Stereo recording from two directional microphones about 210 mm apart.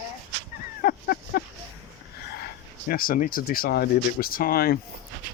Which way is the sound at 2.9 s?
45° left (ahead or behind).